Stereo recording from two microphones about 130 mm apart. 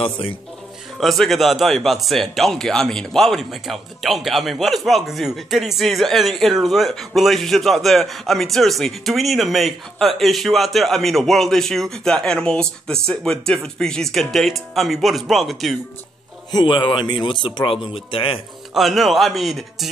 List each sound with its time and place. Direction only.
0.0 s speech: 45° left (ahead or behind)
0.9 s speech: centre (ahead or behind)
16.5 s speech: 40° left (ahead or behind)
18.8 s speech: centre (ahead or behind)